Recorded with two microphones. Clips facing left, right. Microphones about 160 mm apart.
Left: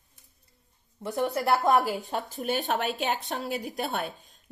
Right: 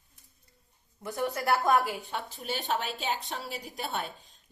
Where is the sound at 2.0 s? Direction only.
40° left (ahead or behind).